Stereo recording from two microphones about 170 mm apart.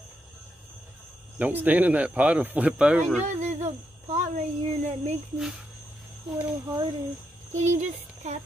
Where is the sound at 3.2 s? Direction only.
45° right (ahead or behind).